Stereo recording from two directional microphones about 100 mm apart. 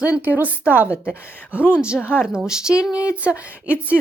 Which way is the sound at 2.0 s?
20° left (ahead or behind).